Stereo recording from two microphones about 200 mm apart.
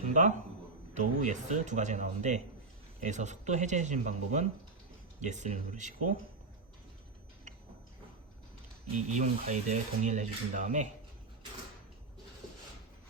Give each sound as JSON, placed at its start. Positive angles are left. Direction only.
{"t": 0.1, "sound": "a man's voice", "side_deg": -40}
{"t": 9.0, "sound": "speech", "side_deg": -35}